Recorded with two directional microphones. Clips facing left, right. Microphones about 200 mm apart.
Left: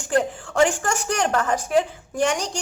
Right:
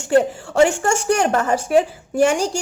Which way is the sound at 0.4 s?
25° right (ahead or behind).